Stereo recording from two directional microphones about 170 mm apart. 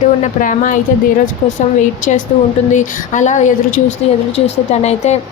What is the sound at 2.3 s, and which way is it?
A woman's voice, 40° left (ahead or behind).